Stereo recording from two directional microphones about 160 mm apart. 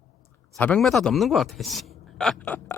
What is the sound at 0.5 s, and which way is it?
A man's voice, 5° left (ahead or behind).